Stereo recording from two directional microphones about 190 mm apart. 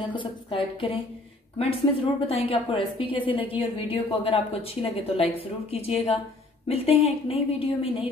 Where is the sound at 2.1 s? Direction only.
30° left (ahead or behind).